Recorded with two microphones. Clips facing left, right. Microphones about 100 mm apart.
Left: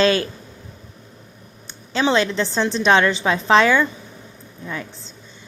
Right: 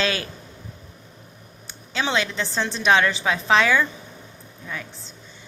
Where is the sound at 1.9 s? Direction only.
35° left (ahead or behind).